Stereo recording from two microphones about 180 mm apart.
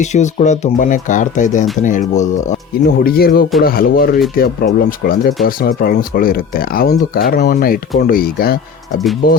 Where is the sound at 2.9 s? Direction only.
55° left (ahead or behind).